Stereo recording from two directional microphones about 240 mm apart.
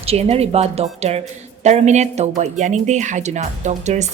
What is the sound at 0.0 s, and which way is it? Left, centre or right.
A woman's voice, right.